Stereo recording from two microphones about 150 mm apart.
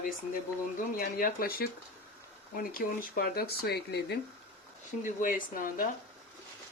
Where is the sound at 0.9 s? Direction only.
75° left (ahead or behind).